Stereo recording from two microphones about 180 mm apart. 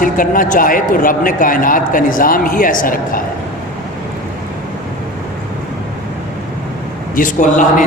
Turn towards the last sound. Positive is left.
turn(degrees=45)  # may be behind; listen again after turning